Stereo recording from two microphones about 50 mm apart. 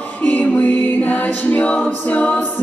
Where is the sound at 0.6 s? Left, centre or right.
Left.